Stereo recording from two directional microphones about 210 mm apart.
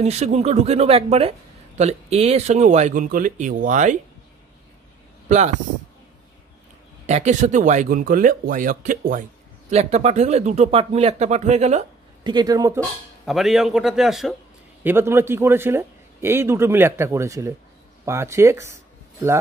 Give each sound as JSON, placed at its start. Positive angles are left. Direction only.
{"t": 0.0, "sound": "speech", "side_deg": -30}
{"t": 7.1, "sound": "speech", "side_deg": -35}
{"t": 13.2, "sound": "a man's voice", "side_deg": 0}